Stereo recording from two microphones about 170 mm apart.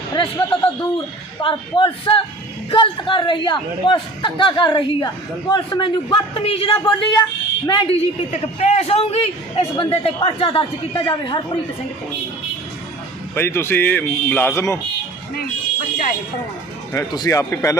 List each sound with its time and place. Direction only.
0.1 s a man's voice: 30° left (ahead or behind)
13.3 s speech: 15° left (ahead or behind)
16.9 s speech: 20° left (ahead or behind)